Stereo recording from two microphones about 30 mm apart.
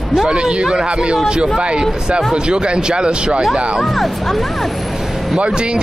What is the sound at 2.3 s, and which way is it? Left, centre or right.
Speech, right.